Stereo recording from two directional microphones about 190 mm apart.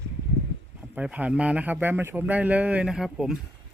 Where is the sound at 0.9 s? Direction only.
5° right (ahead or behind).